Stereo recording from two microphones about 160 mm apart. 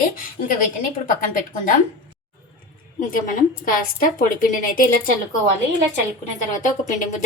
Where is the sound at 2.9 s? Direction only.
55° left (ahead or behind).